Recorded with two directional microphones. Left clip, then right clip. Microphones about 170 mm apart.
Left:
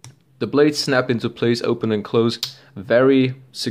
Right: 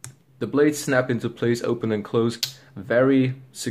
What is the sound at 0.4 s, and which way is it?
Speech, 25° left (ahead or behind).